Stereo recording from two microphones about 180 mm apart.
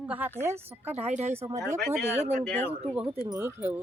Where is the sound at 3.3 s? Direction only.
10° right (ahead or behind).